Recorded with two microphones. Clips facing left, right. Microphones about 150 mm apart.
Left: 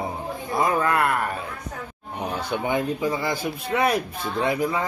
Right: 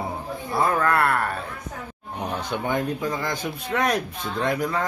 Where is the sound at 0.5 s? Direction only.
10° left (ahead or behind).